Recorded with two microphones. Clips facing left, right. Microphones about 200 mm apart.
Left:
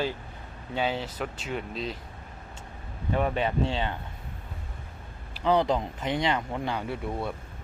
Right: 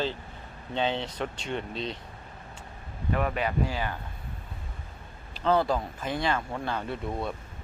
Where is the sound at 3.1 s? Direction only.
25° left (ahead or behind).